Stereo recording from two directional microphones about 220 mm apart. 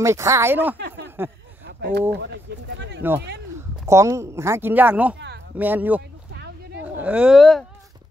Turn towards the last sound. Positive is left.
turn(degrees=0)  # may be behind; listen again after turning